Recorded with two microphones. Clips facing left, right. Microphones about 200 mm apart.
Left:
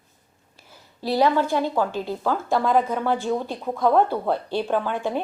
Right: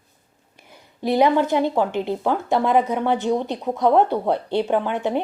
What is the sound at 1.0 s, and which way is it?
Speech, 20° right (ahead or behind).